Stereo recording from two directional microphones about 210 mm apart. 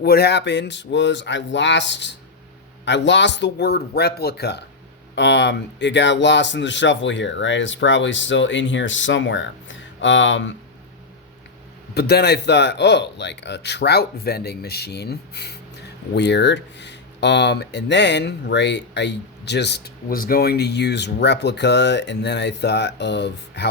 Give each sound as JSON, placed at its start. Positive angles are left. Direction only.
{"t": 0.0, "sound": "speech", "side_deg": 50}
{"t": 11.9, "sound": "speech", "side_deg": 50}